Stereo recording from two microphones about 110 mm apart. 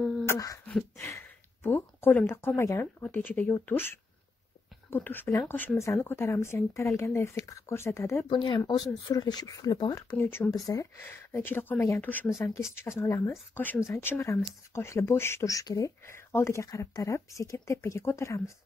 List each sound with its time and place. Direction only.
0.3 s speech: 30° left (ahead or behind)
8.3 s speech: 45° left (ahead or behind)
10.1 s speech: 20° left (ahead or behind)
12.4 s speech: 25° left (ahead or behind)